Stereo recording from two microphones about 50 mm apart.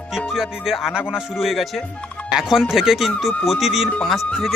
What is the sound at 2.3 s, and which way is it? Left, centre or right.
Speech, centre.